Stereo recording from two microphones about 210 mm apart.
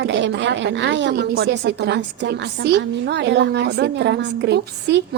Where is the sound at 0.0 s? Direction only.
60° right (ahead or behind).